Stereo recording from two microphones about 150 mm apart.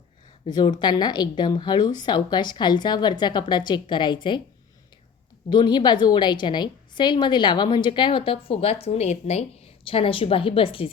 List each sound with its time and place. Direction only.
0.5 s a woman's voice: 30° left (ahead or behind)
5.5 s a woman's voice: 30° left (ahead or behind)